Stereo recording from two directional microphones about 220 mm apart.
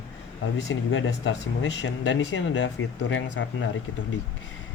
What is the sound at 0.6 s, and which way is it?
Speech, 55° left (ahead or behind).